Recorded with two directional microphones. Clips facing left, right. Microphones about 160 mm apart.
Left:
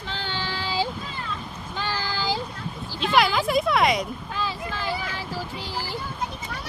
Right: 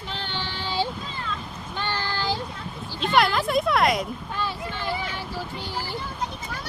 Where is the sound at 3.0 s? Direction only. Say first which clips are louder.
Even; centre (ahead or behind).